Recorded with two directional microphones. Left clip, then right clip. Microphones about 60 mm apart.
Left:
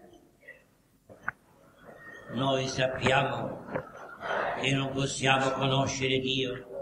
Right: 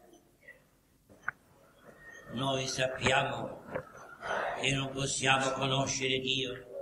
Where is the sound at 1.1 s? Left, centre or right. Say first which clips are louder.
Left 2 dB; left.